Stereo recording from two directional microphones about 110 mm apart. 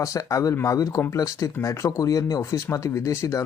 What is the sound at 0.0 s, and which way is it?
Speech, 30° left (ahead or behind).